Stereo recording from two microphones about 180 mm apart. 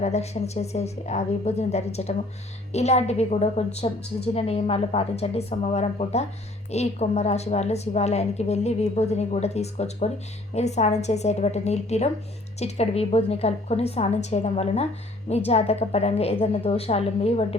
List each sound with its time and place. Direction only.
0.0 s a woman's voice: 35° left (ahead or behind)